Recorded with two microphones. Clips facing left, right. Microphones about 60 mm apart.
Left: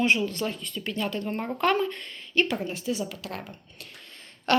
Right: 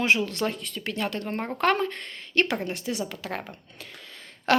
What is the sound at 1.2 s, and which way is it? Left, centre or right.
Speech, right.